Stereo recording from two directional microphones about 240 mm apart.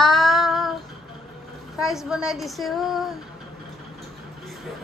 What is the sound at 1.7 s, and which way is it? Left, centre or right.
Speech, centre.